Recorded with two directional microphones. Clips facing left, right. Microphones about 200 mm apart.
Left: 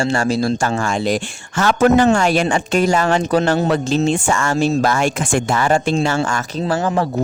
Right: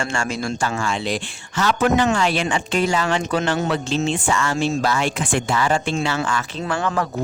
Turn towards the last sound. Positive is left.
turn(degrees=30)  # may be behind; listen again after turning